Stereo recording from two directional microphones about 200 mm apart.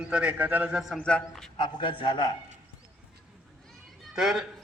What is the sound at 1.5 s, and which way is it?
Speech, 25° left (ahead or behind).